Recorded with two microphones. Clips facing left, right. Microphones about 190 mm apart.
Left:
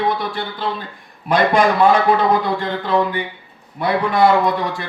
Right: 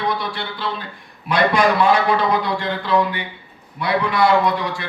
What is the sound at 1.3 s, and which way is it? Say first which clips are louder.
Speech: left 2 dB; 50° left (ahead or behind).